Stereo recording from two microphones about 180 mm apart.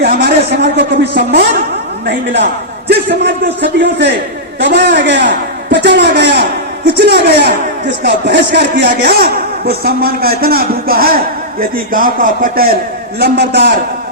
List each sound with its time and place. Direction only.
0.0 s a man's voice: 65° right (ahead or behind)